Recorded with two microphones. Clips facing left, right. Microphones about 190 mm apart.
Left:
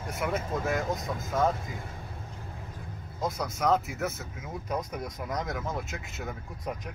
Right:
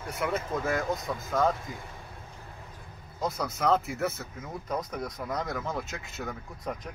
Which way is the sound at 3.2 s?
Centre (ahead or behind).